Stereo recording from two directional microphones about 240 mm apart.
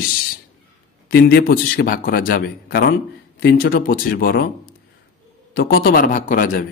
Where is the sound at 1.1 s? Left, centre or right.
Left.